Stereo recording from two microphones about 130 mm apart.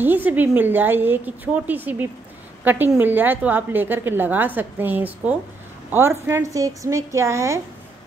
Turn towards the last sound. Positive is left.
turn(degrees=-20)  # may be behind; listen again after turning